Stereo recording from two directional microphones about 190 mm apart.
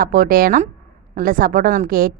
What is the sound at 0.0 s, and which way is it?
A woman's voice, 50° right (ahead or behind).